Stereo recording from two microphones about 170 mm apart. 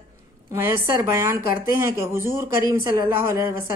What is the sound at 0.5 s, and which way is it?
A woman's voice, 15° right (ahead or behind).